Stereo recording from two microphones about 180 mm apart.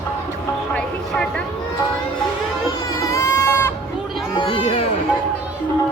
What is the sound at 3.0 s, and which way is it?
Baby cry, 15° left (ahead or behind).